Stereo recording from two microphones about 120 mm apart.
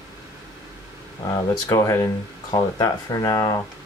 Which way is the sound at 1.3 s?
30° left (ahead or behind).